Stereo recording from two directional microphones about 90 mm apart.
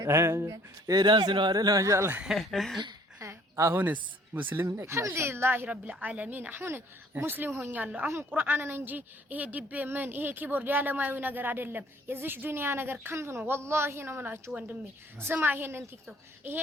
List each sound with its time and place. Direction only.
0.0 s speech: 30° right (ahead or behind)
2.2 s speech: centre (ahead or behind)
3.2 s a sound: 35° right (ahead or behind)
3.8 s a woman's voice: 20° right (ahead or behind)
4.6 s a woman's voice: 30° right (ahead or behind)